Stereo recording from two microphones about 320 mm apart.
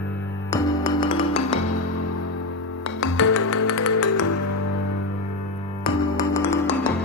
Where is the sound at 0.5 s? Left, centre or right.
Centre.